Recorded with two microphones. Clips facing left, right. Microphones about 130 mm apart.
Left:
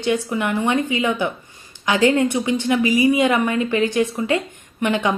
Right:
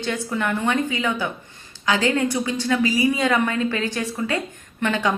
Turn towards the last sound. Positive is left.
turn(degrees=15)  # may be behind; listen again after turning